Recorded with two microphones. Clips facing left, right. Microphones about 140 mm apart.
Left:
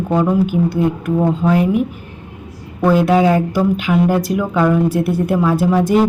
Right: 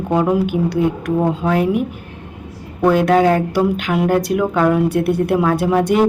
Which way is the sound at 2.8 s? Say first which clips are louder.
Even; 5° left (ahead or behind).